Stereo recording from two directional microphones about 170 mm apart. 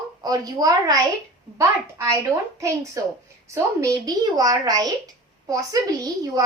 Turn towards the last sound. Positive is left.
turn(degrees=-20)  # may be behind; listen again after turning